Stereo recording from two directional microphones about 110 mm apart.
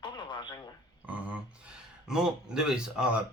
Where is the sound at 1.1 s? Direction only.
15° right (ahead or behind).